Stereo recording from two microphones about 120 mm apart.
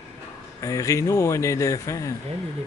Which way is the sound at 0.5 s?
25° left (ahead or behind).